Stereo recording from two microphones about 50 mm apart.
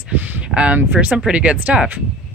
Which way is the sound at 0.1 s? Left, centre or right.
Right.